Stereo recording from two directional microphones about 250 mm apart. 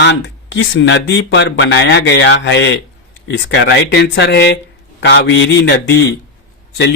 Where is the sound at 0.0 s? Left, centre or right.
Left.